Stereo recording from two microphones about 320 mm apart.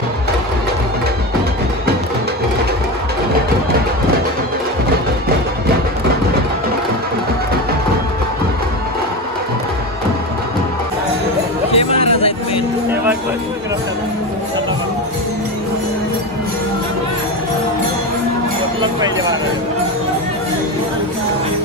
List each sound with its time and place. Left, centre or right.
11.7 s music: centre
18.8 s music: centre